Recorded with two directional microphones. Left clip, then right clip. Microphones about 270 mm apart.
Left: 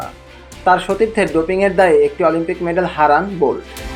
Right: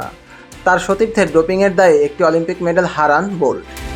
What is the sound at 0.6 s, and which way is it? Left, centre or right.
Speech, right.